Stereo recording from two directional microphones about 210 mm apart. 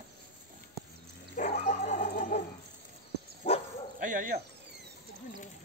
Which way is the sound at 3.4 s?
30° left (ahead or behind).